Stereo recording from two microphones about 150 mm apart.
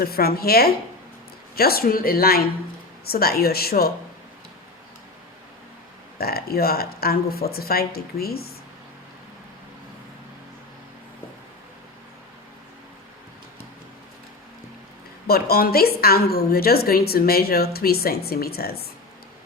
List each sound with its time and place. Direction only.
0.0 s a woman's voice: 90° left
6.1 s a woman's voice: 90° left
15.3 s a woman's voice: 90° left